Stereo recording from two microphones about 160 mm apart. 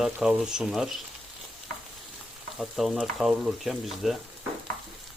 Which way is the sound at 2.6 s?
Centre (ahead or behind).